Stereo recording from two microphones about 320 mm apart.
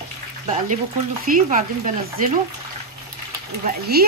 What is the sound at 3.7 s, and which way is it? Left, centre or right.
Speech, right.